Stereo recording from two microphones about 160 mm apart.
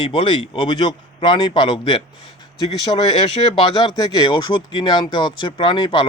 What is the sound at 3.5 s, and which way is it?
Speech, 30° left (ahead or behind).